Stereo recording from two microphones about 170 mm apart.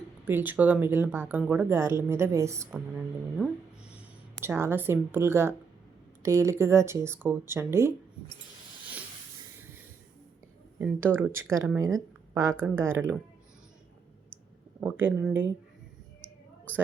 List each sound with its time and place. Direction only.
0.3 s speech: 10° right (ahead or behind)
2.7 s speech: centre (ahead or behind)
10.8 s speech: 10° right (ahead or behind)
14.8 s speech: 10° right (ahead or behind)